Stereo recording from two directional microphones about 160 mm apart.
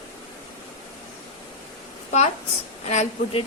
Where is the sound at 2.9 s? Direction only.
45° left (ahead or behind).